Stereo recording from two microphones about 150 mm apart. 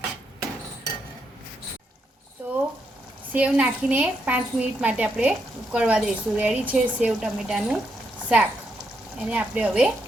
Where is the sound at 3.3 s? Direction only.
10° right (ahead or behind).